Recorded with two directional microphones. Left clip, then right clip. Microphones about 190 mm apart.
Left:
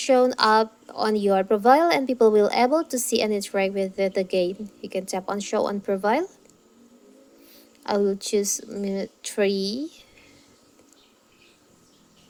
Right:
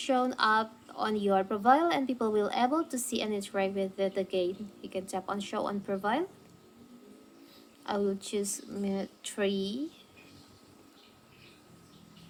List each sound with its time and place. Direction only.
0.0 s speech: 35° left (ahead or behind)
7.9 s speech: 30° left (ahead or behind)